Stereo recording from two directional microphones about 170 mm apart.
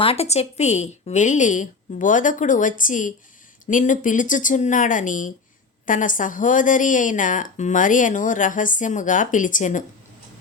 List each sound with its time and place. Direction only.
0.0 s speech: 35° left (ahead or behind)